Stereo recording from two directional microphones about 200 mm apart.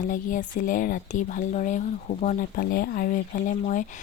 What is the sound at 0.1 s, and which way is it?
Speech, 40° left (ahead or behind).